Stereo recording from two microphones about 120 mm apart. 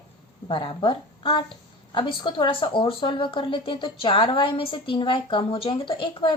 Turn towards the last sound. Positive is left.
turn(degrees=45)  # may be behind; listen again after turning